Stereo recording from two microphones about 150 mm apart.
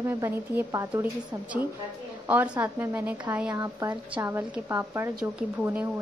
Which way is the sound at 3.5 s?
20° right (ahead or behind).